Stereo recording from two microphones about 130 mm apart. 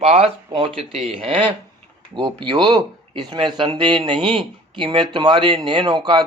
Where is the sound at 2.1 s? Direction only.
35° right (ahead or behind).